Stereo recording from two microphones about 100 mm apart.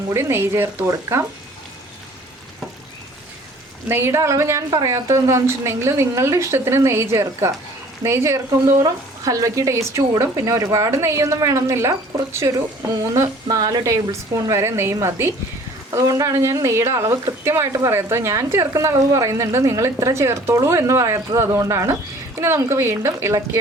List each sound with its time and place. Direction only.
0.1 s a woman's voice: 25° right (ahead or behind)
3.8 s a woman's voice: 25° right (ahead or behind)